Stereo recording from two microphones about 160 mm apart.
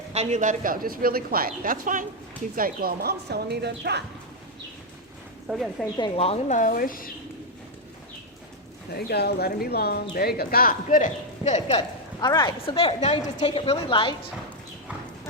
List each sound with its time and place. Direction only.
0.1 s a man's voice: 45° right (ahead or behind)
2.6 s speech: 65° right (ahead or behind); by 4.0 s 90° right
5.5 s a woman's voice: 10° right (ahead or behind)
6.1 s a woman's voice: 40° left (ahead or behind)
6.6 s speech: 60° left (ahead or behind)
9.0 s speech: 85° left; by 10.8 s 70° left (ahead or behind)
10.8 s speech: 50° left (ahead or behind)
11.7 s a woman's voice: 25° left (ahead or behind)